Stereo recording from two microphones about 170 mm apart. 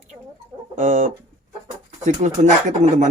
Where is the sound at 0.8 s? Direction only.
45° right (ahead or behind).